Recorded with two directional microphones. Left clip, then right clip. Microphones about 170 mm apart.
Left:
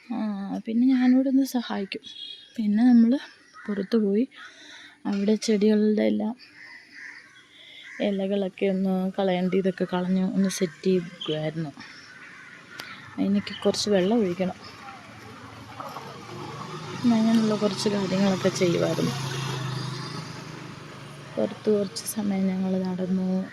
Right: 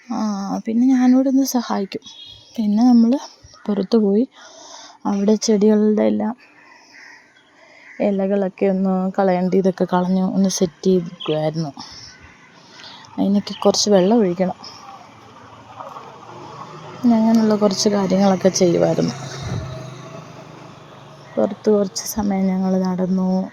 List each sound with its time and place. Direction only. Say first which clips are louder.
0.1 s a sound: right 8 dB; 30° right (ahead or behind)
0.9 s speech: right 6 dB; centre (ahead or behind)
1.5 s speech: right 8 dB; 30° right (ahead or behind)
2.8 s speech: right 5 dB; 15° right (ahead or behind)
3.7 s speech: right 8 dB; 25° right (ahead or behind)
8.0 s speech: right 8 dB; 25° right (ahead or behind)
11.5 s a woman's voice: right 7 dB; 15° right (ahead or behind)
12.9 s a sound: right 7 dB; 30° right (ahead or behind)
13.9 s speech: right 8 dB; 30° right (ahead or behind)
17.1 s speech: right 7 dB; 30° right (ahead or behind)
19.1 s vehicle: right 1 dB; 35° left (ahead or behind)
21.3 s a woman's voice: right 7 dB; 20° right (ahead or behind)